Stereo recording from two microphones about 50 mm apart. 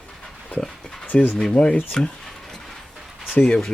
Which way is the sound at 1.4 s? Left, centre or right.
Centre.